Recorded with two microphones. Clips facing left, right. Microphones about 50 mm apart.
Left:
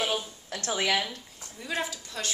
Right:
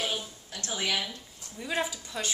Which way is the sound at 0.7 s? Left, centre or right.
Left.